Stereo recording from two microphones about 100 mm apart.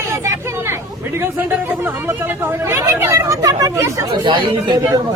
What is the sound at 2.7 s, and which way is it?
Speech, 25° right (ahead or behind).